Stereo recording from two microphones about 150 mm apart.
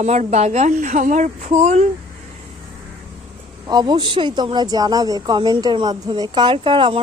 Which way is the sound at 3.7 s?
30° right (ahead or behind).